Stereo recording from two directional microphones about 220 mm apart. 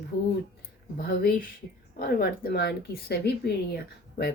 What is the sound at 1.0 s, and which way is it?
Speech, 45° left (ahead or behind).